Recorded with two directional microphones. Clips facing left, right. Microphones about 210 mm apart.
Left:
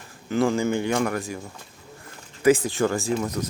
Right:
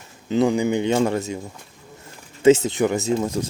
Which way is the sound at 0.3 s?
20° right (ahead or behind).